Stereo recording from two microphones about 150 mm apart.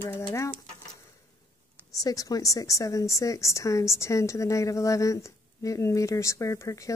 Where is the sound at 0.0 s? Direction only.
15° left (ahead or behind).